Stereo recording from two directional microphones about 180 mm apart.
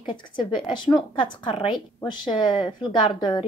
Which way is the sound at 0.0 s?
25° left (ahead or behind).